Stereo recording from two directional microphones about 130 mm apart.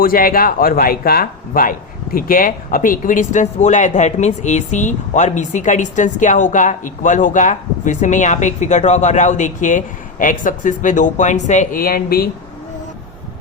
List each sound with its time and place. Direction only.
0.0 s speech: 90° left; by 11.8 s 65° left (ahead or behind)